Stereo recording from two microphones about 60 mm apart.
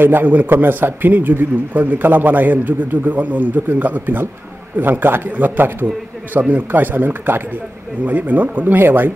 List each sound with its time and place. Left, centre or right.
0.0 s a man's voice: right